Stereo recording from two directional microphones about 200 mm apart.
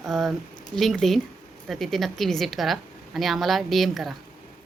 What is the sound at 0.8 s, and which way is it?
A woman's voice, centre (ahead or behind).